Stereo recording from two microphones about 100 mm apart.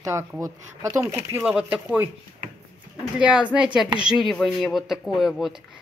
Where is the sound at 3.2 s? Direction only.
10° right (ahead or behind).